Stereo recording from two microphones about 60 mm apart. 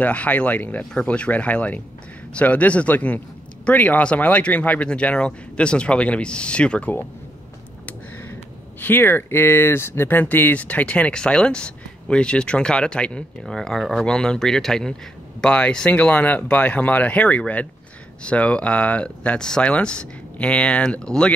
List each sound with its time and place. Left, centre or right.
0.0 s speech: left
8.8 s speech: left; by 21.3 s centre